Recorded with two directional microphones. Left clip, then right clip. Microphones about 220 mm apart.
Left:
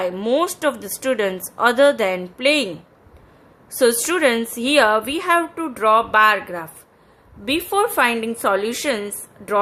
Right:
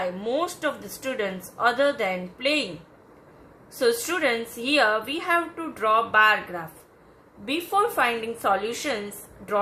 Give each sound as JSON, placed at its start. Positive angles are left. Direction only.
{"t": 0.0, "sound": "a woman's voice", "side_deg": 50}
{"t": 3.8, "sound": "a woman's voice", "side_deg": 50}